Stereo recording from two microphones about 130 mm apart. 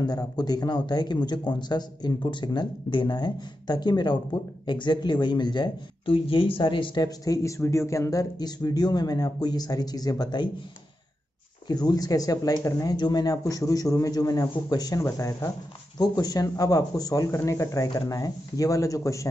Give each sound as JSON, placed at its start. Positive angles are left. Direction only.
{"t": 0.0, "sound": "speech", "side_deg": 30}
{"t": 11.6, "sound": "speech", "side_deg": 30}